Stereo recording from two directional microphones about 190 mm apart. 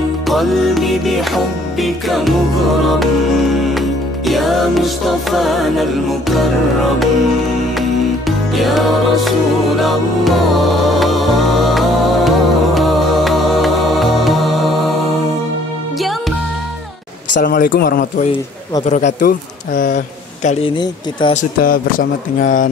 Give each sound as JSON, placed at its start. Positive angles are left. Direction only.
{"t": 0.3, "sound": "music", "side_deg": 0}
{"t": 3.7, "sound": "music", "side_deg": 0}
{"t": 8.3, "sound": "music", "side_deg": 0}
{"t": 17.4, "sound": "speech", "side_deg": 50}
{"t": 18.9, "sound": "speech", "side_deg": 40}
{"t": 20.4, "sound": "speech", "side_deg": 25}
{"t": 21.4, "sound": "speech", "side_deg": 45}